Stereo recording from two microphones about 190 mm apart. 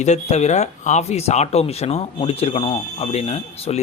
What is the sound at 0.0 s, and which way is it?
Speech, 35° left (ahead or behind).